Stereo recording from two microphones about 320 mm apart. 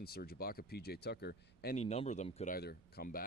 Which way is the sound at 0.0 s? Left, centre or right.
Left.